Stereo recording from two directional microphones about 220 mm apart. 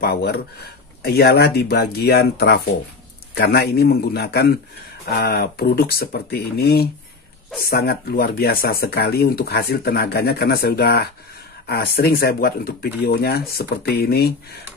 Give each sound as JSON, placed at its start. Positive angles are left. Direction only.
{"t": 0.0, "sound": "speech", "side_deg": 45}